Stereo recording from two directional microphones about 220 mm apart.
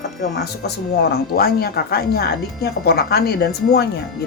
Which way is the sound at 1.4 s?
45° left (ahead or behind).